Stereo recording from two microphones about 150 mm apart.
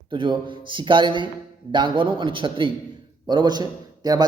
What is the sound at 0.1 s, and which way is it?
A man's voice, 35° right (ahead or behind).